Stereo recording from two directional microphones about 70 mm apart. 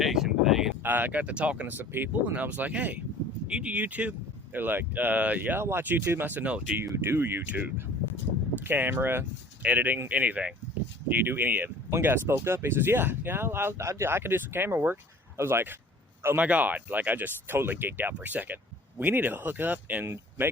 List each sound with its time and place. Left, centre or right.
0.0 s a sound: centre
0.8 s speech: right
1.7 s speech: right
6.8 s speech: right
16.4 s speech: right